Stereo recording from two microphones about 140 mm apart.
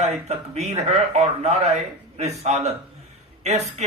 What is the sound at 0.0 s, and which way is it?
A man's voice, 50° right (ahead or behind).